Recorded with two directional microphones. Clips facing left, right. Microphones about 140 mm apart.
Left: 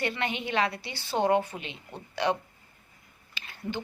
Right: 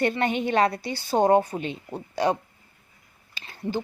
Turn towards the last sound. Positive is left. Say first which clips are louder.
# right 4 dB
turn(degrees=-35)  # may be behind; listen again after turning